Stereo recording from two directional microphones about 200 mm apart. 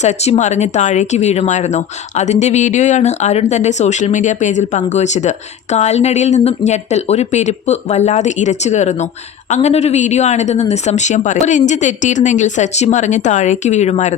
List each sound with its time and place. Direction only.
0.0 s speech: 35° left (ahead or behind)